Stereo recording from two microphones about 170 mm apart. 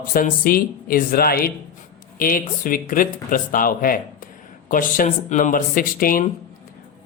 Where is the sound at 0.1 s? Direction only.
55° left (ahead or behind).